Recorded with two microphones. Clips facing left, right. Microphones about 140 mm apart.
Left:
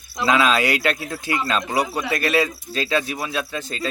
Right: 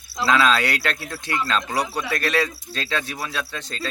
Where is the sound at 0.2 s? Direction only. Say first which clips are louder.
Left 1 dB; 10° left (ahead or behind).